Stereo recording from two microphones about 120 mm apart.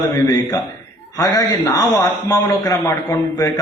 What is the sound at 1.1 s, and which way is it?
A man's voice, 25° left (ahead or behind).